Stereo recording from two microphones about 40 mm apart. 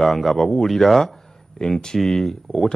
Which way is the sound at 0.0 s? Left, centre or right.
Centre.